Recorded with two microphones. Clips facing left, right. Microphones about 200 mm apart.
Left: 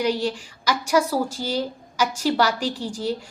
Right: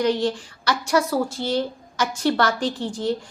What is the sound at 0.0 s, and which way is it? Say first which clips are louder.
A woman's voice: right 2 dB; 10° left (ahead or behind).